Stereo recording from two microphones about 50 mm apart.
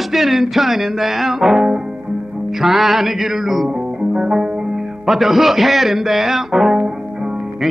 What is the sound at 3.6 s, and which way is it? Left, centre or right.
Music, centre.